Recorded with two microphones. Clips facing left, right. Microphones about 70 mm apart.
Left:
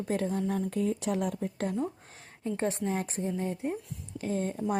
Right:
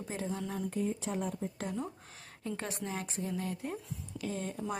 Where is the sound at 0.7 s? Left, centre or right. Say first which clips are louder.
Left 5 dB; left.